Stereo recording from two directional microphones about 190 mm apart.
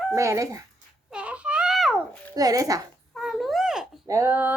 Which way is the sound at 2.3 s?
20° right (ahead or behind).